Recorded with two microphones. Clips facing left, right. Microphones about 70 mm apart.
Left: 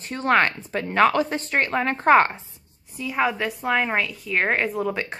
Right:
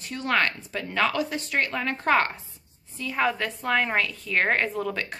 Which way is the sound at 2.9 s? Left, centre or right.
Centre.